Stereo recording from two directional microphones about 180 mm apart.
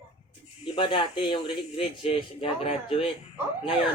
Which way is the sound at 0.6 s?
30° left (ahead or behind).